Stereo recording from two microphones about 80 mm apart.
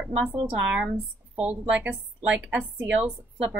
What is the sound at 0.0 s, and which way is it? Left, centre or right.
A woman's voice, centre.